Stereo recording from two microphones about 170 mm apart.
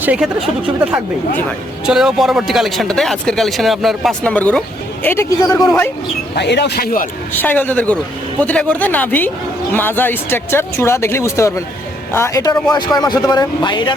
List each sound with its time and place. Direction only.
0.0 s speech: 5° right (ahead or behind); by 5.5 s 15° left (ahead or behind)
6.3 s speech: 80° left; by 7.1 s 60° left (ahead or behind)
7.3 s a man's voice: 10° left (ahead or behind); by 13.9 s 25° left (ahead or behind)